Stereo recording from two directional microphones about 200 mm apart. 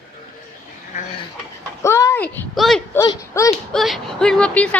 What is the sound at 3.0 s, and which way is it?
Speech, 15° left (ahead or behind).